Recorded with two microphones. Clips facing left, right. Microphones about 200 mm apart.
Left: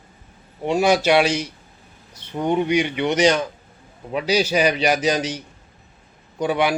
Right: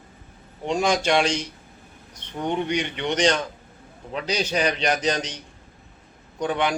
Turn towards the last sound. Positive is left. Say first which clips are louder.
# left 4 dB
turn(degrees=10)  # may be behind; listen again after turning